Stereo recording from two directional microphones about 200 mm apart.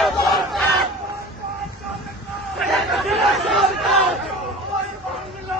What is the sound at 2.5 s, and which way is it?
Chatter, centre (ahead or behind).